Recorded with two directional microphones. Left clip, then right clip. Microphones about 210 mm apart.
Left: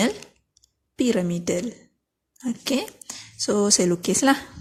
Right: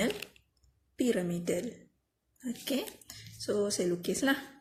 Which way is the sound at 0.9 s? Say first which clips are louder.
Left 8 dB; 40° left (ahead or behind).